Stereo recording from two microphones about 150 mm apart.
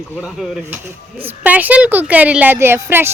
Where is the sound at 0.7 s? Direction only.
15° right (ahead or behind).